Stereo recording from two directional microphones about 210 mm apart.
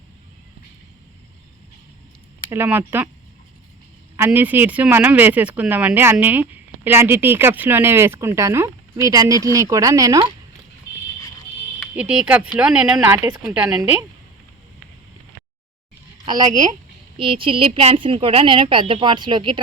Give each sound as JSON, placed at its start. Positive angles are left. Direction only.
{"t": 2.5, "sound": "speech", "side_deg": -10}
{"t": 4.2, "sound": "speech", "side_deg": -10}
{"t": 10.9, "sound": "a sound", "side_deg": 55}
{"t": 11.9, "sound": "speech", "side_deg": -5}
{"t": 16.2, "sound": "a woman's voice", "side_deg": -20}